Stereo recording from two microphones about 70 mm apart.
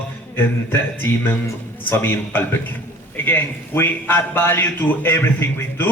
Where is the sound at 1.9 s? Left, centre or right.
Left.